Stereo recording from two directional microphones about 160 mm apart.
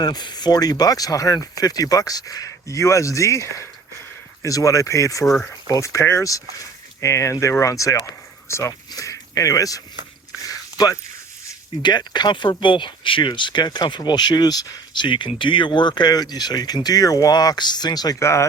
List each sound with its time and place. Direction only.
0.0 s speech: 25° left (ahead or behind)
5.2 s speech: centre (ahead or behind)
5.6 s speech: 20° left (ahead or behind)
10.4 s a sound: 25° left (ahead or behind)
11.8 s speech: 25° left (ahead or behind)